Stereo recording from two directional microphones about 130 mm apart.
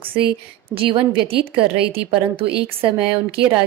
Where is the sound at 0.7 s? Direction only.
45° right (ahead or behind).